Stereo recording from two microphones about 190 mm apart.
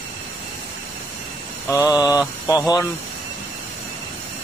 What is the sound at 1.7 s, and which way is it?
Speech, 15° left (ahead or behind).